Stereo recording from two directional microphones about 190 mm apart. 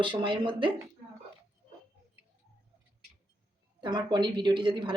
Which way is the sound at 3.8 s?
25° right (ahead or behind).